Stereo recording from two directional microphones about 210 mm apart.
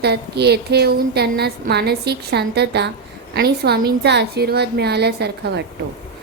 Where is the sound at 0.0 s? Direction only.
50° right (ahead or behind).